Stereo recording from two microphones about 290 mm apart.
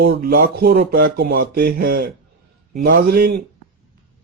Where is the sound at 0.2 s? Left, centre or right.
Right.